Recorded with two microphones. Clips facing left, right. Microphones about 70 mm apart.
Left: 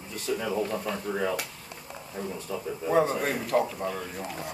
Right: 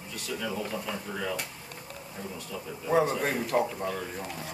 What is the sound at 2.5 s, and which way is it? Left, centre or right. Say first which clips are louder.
Speech: left 5 dB; left.